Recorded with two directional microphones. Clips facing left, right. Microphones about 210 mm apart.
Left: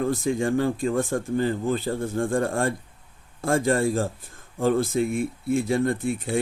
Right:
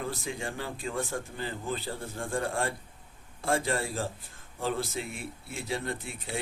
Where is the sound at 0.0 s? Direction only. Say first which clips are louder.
Left 11 dB; 50° left (ahead or behind).